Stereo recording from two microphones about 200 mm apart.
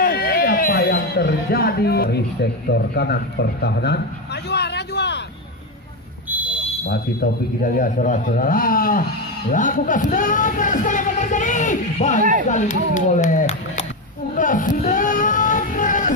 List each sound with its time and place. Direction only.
0.0 s speech: 50° left (ahead or behind)
6.2 s buzzer: 10° right (ahead or behind)
6.9 s a man's voice: 45° left (ahead or behind)
12.2 s speech: 40° right (ahead or behind)
12.4 s speech: 40° left (ahead or behind)
14.3 s a sound: 40° left (ahead or behind)